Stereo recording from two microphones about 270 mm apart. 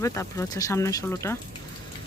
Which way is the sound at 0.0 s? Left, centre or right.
Centre.